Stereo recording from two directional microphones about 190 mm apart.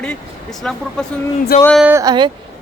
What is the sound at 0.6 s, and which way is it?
Speech, 5° left (ahead or behind).